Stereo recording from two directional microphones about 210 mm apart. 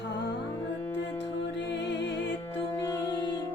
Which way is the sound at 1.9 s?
55° left (ahead or behind).